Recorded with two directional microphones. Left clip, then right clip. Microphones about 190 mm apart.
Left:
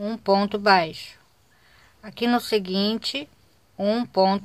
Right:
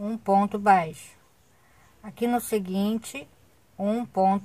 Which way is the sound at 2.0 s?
20° left (ahead or behind).